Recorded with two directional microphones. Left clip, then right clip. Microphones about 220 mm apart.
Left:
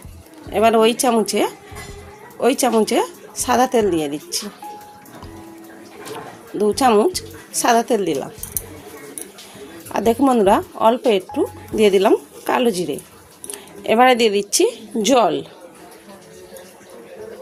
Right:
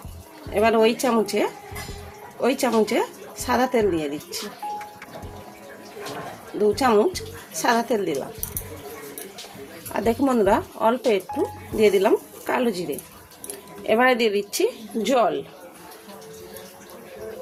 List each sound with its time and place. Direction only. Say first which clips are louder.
0.5 s a woman's voice: left 4 dB; 35° left (ahead or behind)
6.6 s a woman's voice: left 4 dB; 35° left (ahead or behind)
9.9 s a woman's voice: left 6 dB; 40° left (ahead or behind)